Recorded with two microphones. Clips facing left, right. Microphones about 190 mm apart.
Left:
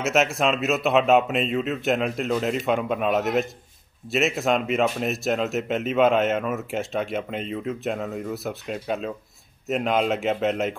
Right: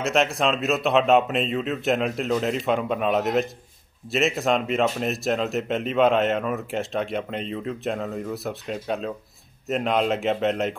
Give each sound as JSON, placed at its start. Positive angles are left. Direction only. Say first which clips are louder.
{"t": 0.0, "sound": "speech", "louder": "even", "side_deg": 0}